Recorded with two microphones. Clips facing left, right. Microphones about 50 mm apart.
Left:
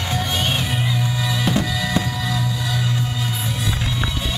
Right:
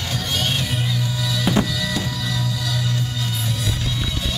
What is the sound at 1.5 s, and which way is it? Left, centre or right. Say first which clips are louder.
Music: right 2 dB; centre.